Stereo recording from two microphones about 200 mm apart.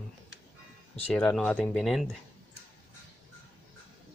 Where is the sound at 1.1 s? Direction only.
5° left (ahead or behind).